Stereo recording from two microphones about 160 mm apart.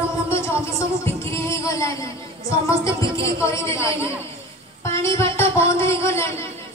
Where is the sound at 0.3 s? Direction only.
15° left (ahead or behind).